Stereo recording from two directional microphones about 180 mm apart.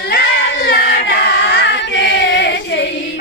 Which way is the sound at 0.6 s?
60° left (ahead or behind).